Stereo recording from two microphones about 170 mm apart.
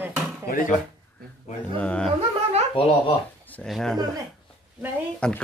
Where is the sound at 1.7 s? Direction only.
5° left (ahead or behind).